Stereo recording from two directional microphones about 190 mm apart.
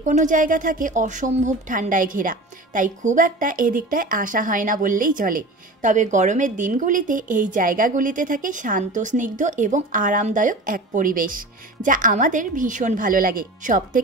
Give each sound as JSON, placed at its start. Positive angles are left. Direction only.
{"t": 0.0, "sound": "speech", "side_deg": -40}